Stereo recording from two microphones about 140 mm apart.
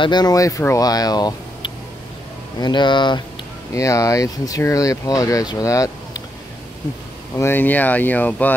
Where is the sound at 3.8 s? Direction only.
25° left (ahead or behind).